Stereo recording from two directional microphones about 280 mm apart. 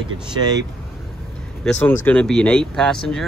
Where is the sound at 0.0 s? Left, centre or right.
Centre.